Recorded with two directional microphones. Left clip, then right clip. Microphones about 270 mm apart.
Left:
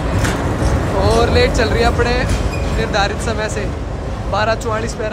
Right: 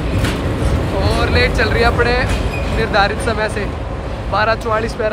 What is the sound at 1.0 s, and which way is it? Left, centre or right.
Speech, centre.